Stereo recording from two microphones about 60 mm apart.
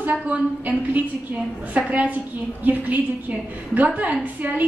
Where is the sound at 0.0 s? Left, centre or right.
Right.